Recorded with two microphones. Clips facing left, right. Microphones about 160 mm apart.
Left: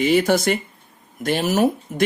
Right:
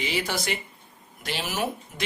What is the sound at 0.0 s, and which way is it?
Speech, 50° left (ahead or behind).